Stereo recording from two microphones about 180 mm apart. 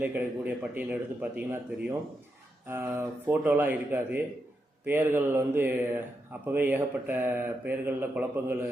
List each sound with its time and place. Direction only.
0.0 s speech: 10° right (ahead or behind)
2.6 s speech: 10° right (ahead or behind)